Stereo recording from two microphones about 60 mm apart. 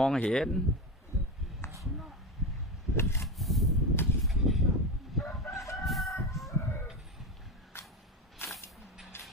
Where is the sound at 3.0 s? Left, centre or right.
Left.